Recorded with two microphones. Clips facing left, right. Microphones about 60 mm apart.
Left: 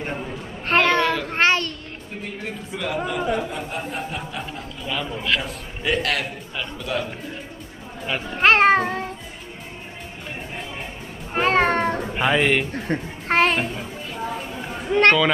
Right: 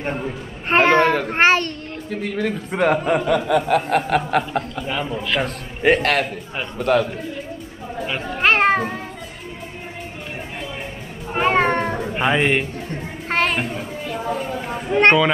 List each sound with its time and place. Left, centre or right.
0.2 s a sound: right
2.0 s speech: right
3.3 s speech: right
5.4 s a man's voice: right
8.1 s children playing: centre
11.3 s cat: centre
12.7 s a woman's voice: left
13.3 s a child's voice: centre
14.8 s a sound: centre
15.0 s speech: centre